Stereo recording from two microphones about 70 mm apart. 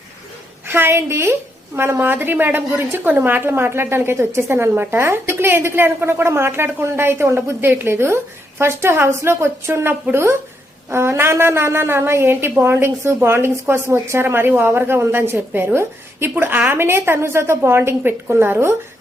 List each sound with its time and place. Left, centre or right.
0.7 s a woman's voice: right